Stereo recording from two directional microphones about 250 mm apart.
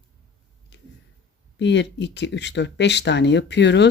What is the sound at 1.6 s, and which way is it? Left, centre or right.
Speech, left.